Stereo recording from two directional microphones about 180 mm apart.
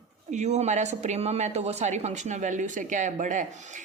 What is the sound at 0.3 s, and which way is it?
A woman's voice, 40° right (ahead or behind).